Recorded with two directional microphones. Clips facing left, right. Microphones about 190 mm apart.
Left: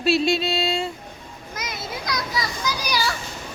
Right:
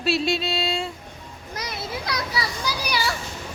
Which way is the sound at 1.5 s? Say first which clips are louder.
Right 1 dB; 30° right (ahead or behind).